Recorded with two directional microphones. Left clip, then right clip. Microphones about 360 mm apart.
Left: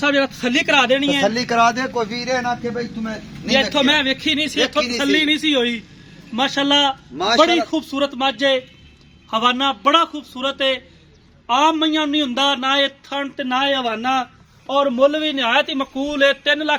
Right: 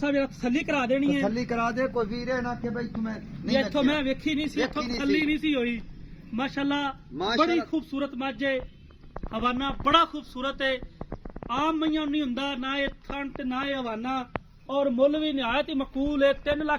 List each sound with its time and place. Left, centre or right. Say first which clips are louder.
0.0 s a man's voice: left 9 dB; left